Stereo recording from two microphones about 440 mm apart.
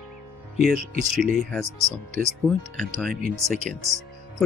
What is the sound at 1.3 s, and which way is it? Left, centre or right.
Speech, centre.